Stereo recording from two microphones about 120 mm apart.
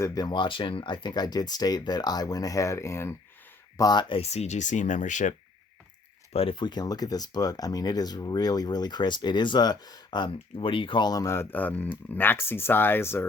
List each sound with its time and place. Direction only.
0.0 s speech: 30° left (ahead or behind)
3.8 s speech: 35° left (ahead or behind)
4.1 s speech: 60° left (ahead or behind); by 5.3 s 90° left
6.3 s speech: 50° left (ahead or behind); by 13.2 s 20° left (ahead or behind)